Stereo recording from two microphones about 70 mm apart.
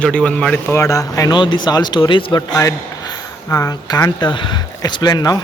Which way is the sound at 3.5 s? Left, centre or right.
Left.